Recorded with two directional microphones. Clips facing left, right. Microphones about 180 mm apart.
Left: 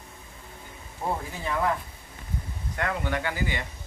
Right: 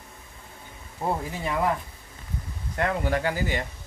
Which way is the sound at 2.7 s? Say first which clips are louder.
Right 4 dB; 35° right (ahead or behind).